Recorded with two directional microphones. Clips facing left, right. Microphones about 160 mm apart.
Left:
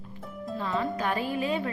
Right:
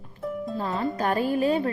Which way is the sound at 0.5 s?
40° right (ahead or behind).